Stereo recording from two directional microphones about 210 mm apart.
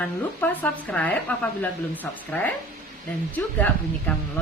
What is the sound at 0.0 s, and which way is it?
Speech, 5° left (ahead or behind).